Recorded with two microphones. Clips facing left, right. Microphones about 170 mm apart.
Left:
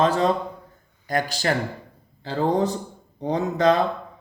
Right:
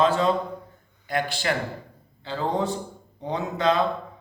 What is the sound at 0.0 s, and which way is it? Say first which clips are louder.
Speech: left 1 dB; 40° left (ahead or behind).